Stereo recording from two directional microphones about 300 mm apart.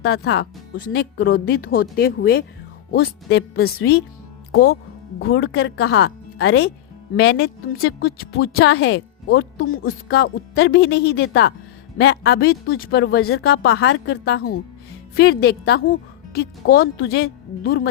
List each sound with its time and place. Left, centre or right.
0.0 s a woman's voice: left